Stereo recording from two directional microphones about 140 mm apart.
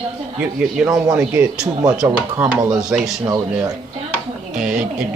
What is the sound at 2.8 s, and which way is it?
Speech, 5° right (ahead or behind).